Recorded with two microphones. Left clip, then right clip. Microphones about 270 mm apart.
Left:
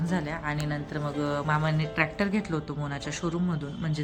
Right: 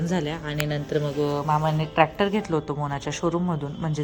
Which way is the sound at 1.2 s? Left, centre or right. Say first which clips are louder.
Right 2 dB; centre.